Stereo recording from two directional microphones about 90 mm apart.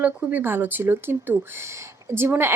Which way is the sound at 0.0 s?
15° right (ahead or behind).